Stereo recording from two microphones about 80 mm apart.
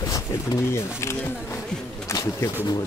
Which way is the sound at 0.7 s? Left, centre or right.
Left.